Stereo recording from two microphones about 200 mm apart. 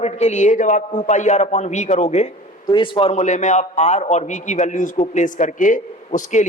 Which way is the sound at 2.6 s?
25° left (ahead or behind).